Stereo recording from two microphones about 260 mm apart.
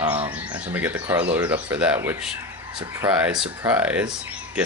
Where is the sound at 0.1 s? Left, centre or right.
Right.